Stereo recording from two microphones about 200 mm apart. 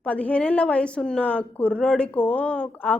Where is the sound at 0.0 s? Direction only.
5° left (ahead or behind).